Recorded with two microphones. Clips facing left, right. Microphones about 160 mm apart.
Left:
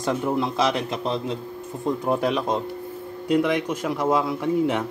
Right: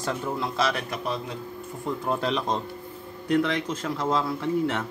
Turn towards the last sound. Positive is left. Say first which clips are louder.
# left 4 dB
turn(degrees=15)  # may be behind; listen again after turning